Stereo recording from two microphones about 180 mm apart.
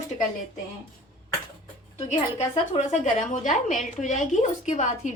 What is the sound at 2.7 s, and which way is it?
A woman's voice, 40° left (ahead or behind).